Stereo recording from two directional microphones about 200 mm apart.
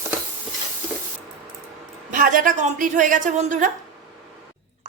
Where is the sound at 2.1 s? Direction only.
40° right (ahead or behind).